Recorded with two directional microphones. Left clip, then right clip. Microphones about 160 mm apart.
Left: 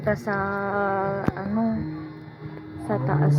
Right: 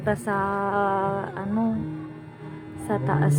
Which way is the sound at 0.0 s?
10° right (ahead or behind).